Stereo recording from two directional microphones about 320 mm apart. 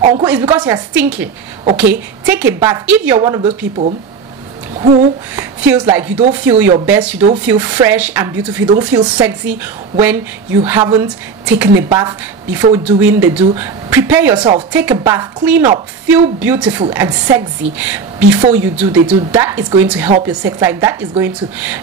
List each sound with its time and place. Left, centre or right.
0.0 s a woman's voice: centre
5.3 s a woman's voice: centre